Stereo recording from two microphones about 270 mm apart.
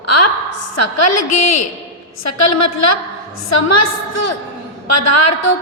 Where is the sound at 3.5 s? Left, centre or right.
Left.